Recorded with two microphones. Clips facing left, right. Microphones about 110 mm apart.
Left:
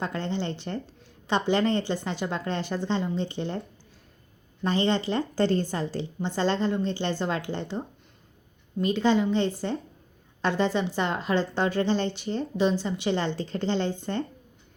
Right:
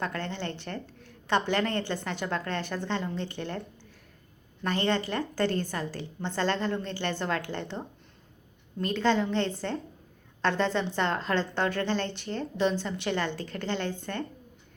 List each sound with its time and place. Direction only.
0.0 s a woman's voice: 20° left (ahead or behind)
4.6 s a woman's voice: 20° left (ahead or behind)